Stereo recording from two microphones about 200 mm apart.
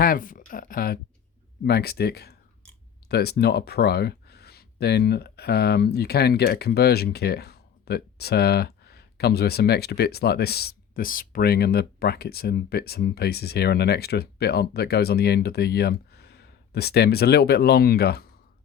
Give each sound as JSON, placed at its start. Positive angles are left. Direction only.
{"t": 0.0, "sound": "speech", "side_deg": 45}